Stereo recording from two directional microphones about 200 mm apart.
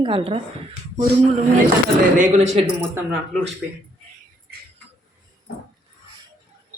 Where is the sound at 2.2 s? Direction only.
35° right (ahead or behind).